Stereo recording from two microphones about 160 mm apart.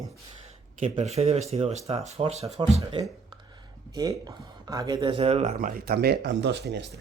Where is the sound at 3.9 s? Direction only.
25° right (ahead or behind).